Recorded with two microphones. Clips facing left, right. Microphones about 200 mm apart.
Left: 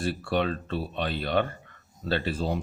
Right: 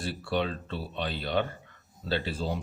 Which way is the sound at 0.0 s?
55° left (ahead or behind).